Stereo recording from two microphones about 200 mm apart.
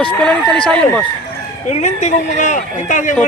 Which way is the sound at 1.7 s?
35° left (ahead or behind).